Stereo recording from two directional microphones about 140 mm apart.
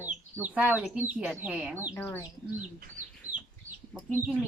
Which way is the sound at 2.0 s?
15° left (ahead or behind).